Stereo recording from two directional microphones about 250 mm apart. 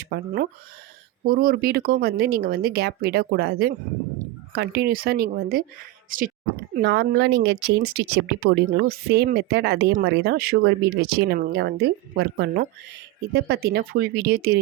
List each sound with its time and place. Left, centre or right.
0.0 s speech: right